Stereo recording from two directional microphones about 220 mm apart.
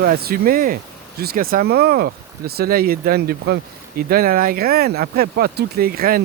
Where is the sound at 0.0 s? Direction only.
45° right (ahead or behind).